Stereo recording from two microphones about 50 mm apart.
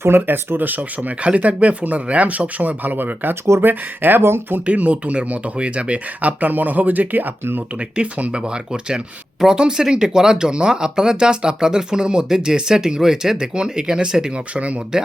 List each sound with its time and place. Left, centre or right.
0.0 s speech: right
4.6 s speech: right
7.8 s speech: right